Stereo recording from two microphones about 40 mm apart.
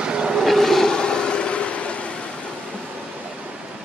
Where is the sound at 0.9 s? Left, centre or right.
Left.